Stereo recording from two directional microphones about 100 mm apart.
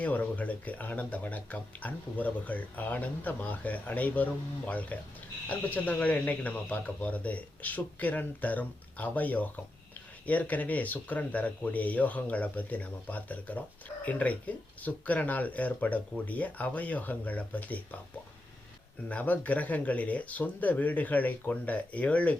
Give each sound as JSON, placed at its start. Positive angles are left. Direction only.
{"t": 0.0, "sound": "speech", "side_deg": 15}
{"t": 19.0, "sound": "speech", "side_deg": 15}